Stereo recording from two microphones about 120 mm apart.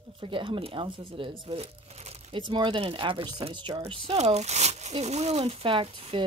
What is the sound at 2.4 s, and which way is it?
Speech, 45° right (ahead or behind).